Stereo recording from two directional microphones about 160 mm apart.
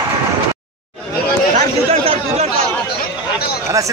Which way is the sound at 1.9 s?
40° right (ahead or behind).